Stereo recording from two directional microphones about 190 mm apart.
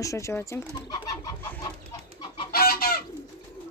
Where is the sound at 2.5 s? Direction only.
55° left (ahead or behind).